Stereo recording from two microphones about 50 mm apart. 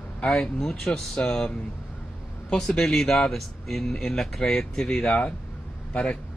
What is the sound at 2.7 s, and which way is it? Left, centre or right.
Speech, centre.